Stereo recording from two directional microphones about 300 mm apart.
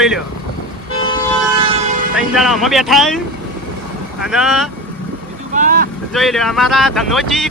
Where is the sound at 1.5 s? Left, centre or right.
Centre.